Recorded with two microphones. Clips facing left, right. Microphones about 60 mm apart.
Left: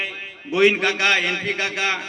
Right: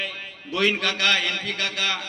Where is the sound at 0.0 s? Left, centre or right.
Centre.